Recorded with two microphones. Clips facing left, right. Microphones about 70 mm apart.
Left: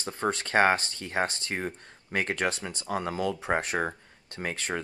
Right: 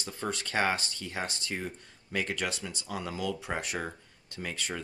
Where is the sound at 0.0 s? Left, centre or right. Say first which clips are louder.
Left 6 dB; left.